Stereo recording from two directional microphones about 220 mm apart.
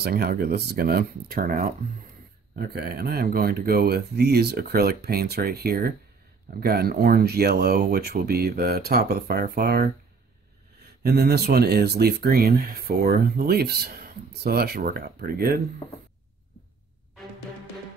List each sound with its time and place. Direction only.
0.0 s speech: 45° right (ahead or behind)
11.0 s speech: 45° right (ahead or behind)